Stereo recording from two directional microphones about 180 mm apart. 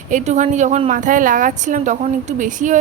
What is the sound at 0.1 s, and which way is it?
Speech, 40° right (ahead or behind).